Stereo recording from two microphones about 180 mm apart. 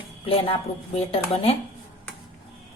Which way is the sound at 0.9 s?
35° left (ahead or behind).